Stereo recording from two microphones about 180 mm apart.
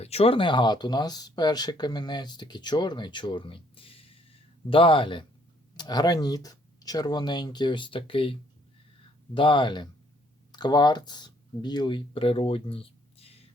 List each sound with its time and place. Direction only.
0.0 s speech: 35° left (ahead or behind)